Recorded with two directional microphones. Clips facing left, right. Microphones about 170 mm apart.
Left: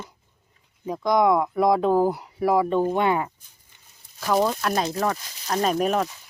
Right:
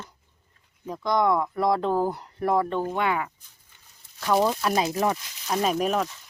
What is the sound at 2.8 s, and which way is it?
Speech, 20° left (ahead or behind).